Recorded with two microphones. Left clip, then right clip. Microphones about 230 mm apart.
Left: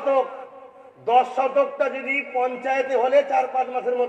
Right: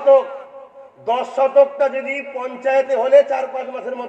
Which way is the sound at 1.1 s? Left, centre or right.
Right.